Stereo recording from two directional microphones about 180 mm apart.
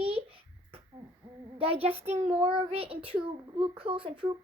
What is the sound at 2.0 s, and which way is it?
A child's voice, 40° right (ahead or behind).